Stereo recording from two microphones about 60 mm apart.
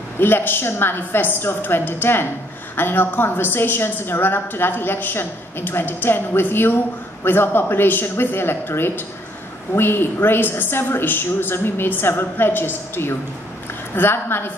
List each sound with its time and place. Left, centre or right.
0.2 s a woman's voice: left